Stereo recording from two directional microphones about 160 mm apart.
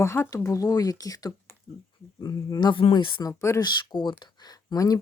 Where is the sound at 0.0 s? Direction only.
15° left (ahead or behind).